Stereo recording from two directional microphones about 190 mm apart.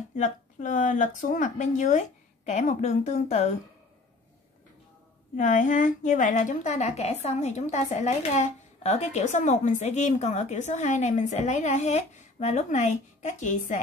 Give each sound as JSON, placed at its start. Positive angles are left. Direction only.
{"t": 0.1, "sound": "a woman's voice", "side_deg": 40}
{"t": 5.3, "sound": "a woman's voice", "side_deg": 40}